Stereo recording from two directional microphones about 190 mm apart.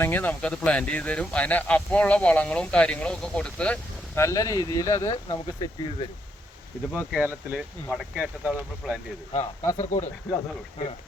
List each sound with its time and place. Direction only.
0.0 s speech: 10° left (ahead or behind)
6.9 s speech: 10° right (ahead or behind)
9.4 s speech: 15° left (ahead or behind)
9.7 s speech: 40° left (ahead or behind)